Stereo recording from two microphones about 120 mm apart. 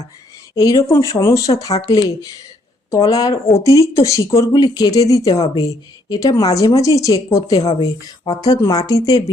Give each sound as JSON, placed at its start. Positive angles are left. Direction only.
{"t": 0.5, "sound": "speech", "side_deg": 30}